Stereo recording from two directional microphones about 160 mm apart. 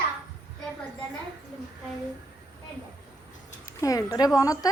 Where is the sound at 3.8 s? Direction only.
20° left (ahead or behind).